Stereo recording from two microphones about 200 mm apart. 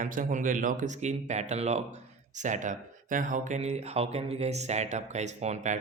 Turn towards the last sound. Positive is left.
turn(degrees=-35)  # may be behind; listen again after turning